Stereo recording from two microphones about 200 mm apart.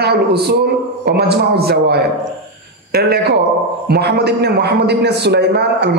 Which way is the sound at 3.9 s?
55° right (ahead or behind).